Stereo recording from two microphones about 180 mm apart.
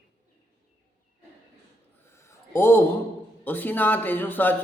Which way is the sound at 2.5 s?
15° left (ahead or behind).